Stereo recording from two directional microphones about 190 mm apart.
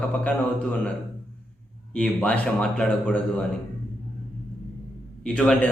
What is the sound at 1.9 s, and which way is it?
A man's voice, 5° left (ahead or behind).